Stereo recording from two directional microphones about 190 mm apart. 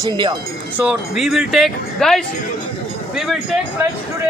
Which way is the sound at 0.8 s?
5° right (ahead or behind).